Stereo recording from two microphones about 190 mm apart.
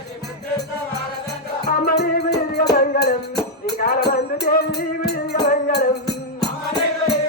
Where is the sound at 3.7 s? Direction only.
55° left (ahead or behind).